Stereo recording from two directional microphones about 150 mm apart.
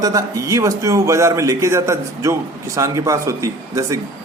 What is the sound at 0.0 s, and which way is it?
Speech, 20° right (ahead or behind).